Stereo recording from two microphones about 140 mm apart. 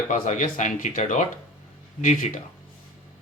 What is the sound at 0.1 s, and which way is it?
Speech, 65° left (ahead or behind).